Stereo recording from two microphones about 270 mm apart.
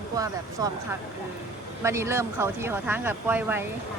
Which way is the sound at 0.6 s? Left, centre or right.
Centre.